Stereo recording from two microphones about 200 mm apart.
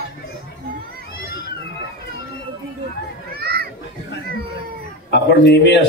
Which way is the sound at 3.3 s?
50° right (ahead or behind).